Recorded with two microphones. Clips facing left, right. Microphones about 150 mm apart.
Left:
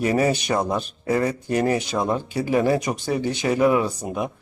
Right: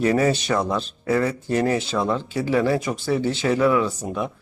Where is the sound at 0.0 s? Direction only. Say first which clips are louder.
Right 1 dB; 15° left (ahead or behind).